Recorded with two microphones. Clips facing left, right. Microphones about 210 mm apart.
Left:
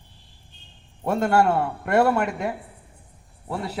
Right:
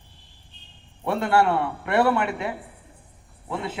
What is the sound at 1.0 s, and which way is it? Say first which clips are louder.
A man's voice: left 1 dB; 45° left (ahead or behind).